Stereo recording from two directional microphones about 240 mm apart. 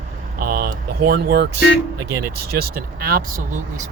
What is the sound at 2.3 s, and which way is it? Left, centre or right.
Speech, right.